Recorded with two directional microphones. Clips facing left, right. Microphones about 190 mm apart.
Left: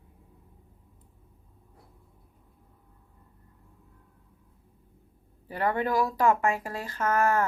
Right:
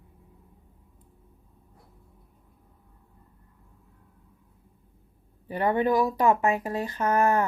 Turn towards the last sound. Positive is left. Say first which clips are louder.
# right 2 dB
turn(degrees=-20)  # may be behind; listen again after turning